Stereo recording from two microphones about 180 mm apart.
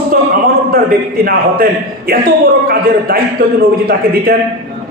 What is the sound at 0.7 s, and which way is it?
Speech, 55° right (ahead or behind).